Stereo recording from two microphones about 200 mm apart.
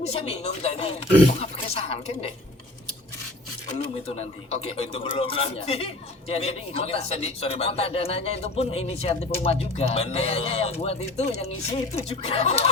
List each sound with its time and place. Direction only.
0.0 s speech: 30° left (ahead or behind)
3.8 s speech: 30° left (ahead or behind)